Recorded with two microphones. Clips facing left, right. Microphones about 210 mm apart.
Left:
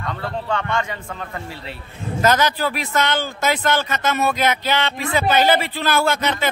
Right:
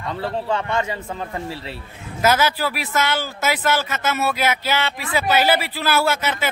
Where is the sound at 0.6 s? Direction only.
30° right (ahead or behind).